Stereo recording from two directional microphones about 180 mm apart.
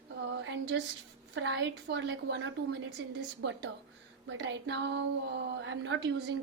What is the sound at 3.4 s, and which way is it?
Speech, 70° right (ahead or behind).